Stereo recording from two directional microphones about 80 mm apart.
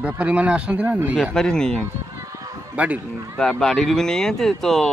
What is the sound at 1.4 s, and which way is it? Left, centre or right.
Speech, centre.